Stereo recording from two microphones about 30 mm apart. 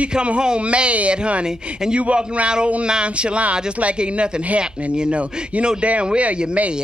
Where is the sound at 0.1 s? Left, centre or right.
Right.